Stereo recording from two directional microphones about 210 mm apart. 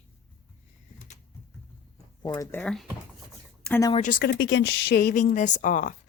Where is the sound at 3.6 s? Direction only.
10° left (ahead or behind).